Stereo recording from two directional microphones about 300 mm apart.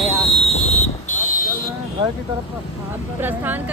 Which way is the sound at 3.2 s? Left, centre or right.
Centre.